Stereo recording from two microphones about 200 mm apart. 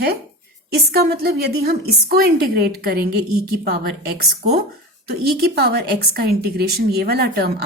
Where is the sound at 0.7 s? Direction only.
50° right (ahead or behind).